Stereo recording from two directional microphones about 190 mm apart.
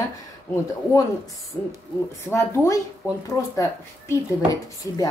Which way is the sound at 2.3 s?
15° left (ahead or behind).